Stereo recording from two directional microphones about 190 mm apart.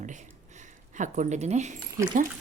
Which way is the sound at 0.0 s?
40° right (ahead or behind).